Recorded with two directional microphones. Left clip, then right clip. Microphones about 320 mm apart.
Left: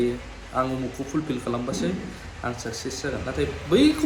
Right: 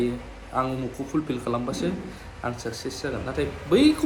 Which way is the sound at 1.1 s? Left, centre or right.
Centre.